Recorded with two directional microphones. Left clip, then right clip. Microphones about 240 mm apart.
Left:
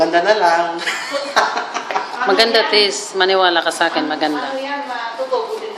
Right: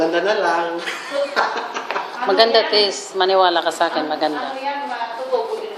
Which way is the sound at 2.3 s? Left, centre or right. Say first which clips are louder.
Left 1 dB; centre.